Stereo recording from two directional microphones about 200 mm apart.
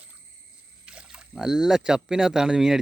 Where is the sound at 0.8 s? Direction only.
5° right (ahead or behind).